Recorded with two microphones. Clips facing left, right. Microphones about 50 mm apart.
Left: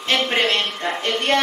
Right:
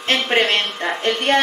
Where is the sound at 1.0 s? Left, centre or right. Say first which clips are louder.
Right 2 dB; right.